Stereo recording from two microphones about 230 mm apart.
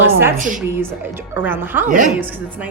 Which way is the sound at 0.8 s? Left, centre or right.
Centre.